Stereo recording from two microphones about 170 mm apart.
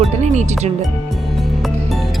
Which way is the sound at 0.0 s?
40° right (ahead or behind).